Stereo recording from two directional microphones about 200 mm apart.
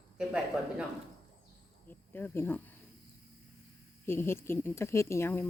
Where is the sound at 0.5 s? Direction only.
5° right (ahead or behind).